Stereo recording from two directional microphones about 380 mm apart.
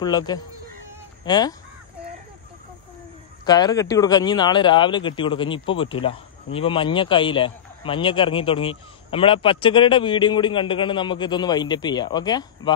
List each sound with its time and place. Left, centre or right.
0.0 s a man's voice: centre
3.4 s a man's voice: centre